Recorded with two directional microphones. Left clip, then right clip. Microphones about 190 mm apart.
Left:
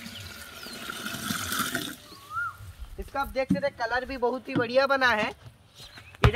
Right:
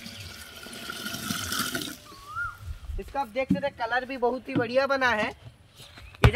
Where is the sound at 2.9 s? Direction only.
10° right (ahead or behind).